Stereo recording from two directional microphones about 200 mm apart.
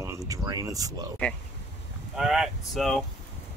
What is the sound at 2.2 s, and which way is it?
Speech, centre (ahead or behind).